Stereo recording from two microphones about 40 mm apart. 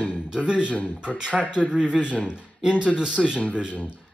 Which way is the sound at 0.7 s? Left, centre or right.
Left.